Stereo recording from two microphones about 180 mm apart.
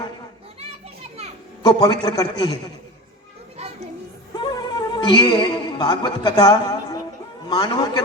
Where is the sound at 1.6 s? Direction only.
25° left (ahead or behind).